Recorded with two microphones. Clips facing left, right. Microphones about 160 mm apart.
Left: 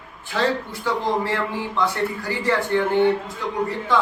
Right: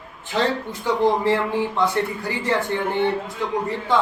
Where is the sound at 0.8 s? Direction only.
15° right (ahead or behind).